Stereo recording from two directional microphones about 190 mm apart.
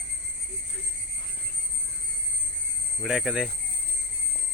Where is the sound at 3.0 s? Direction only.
Centre (ahead or behind).